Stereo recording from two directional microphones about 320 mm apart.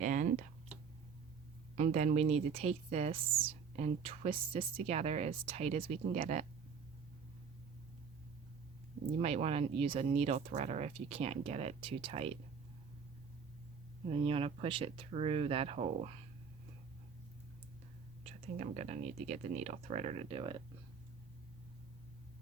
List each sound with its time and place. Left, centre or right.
0.0 s a sound: right
1.7 s speech: right
9.1 s speech: centre
14.1 s speech: centre
18.2 s speech: right